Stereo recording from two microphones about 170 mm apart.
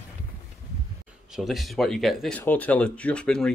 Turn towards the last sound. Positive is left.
turn(degrees=5)  # may be behind; listen again after turning